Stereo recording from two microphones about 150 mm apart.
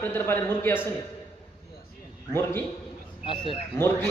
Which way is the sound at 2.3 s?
15° left (ahead or behind).